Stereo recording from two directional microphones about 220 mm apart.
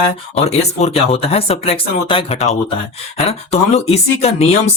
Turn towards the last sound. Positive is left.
turn(degrees=30)  # may be behind; listen again after turning